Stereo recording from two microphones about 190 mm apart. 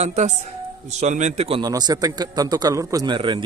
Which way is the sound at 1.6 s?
20° right (ahead or behind).